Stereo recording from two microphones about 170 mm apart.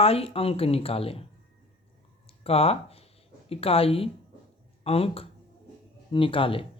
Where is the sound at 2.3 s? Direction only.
35° left (ahead or behind).